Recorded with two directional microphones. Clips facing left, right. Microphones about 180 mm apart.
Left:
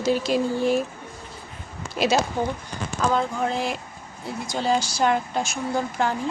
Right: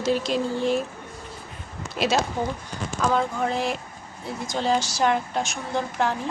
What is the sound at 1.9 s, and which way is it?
A woman's voice, centre (ahead or behind).